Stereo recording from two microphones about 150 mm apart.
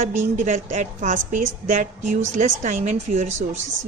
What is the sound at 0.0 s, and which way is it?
A woman's voice, 55° right (ahead or behind).